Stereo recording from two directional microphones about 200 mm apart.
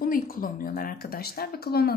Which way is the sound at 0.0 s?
45° left (ahead or behind).